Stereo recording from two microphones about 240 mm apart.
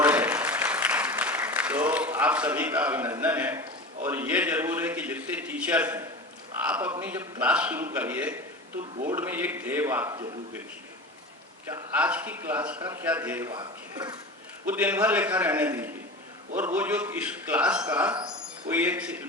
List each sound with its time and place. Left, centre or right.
0.0 s applause: centre
4.0 s a man's voice: centre
11.7 s a man's voice: centre